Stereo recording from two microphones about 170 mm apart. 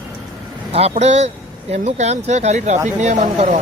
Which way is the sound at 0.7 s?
40° right (ahead or behind).